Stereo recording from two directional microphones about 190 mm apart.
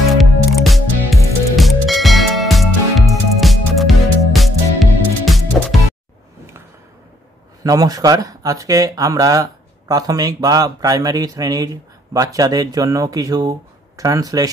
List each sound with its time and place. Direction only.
0.1 s music: centre (ahead or behind)
7.6 s speech: 20° right (ahead or behind)